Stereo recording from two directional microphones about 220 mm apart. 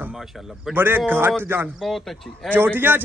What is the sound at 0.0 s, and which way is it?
A man's voice, centre (ahead or behind).